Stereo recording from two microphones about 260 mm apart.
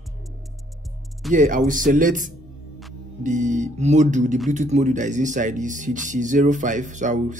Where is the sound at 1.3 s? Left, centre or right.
Right.